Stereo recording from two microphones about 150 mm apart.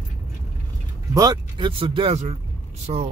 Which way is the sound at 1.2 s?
30° right (ahead or behind).